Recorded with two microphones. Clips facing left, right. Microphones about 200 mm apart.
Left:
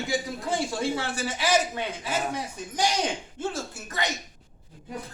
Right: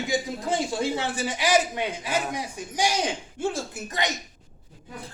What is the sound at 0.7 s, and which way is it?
A man's voice, 20° right (ahead or behind).